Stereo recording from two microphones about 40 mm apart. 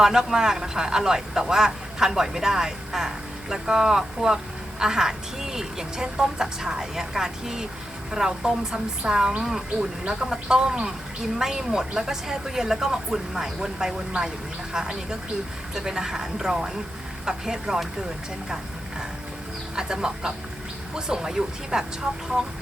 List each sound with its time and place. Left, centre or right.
0.0 s speech: centre
18.4 s music: centre
19.7 s speech: centre